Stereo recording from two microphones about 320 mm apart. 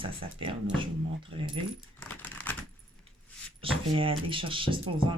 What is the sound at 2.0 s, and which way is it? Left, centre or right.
Typing, centre.